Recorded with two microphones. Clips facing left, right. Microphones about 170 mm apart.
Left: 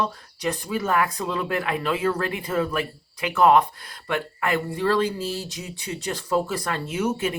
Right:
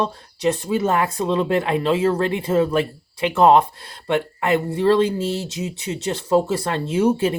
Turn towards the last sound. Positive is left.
turn(degrees=-30)  # may be behind; listen again after turning